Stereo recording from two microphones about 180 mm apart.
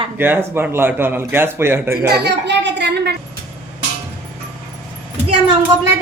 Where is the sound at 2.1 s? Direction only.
70° right (ahead or behind).